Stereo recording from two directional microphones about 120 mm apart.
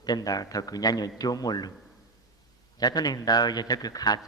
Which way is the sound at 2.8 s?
35° left (ahead or behind).